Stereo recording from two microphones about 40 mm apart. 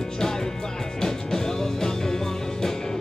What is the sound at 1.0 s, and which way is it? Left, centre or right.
Music, centre.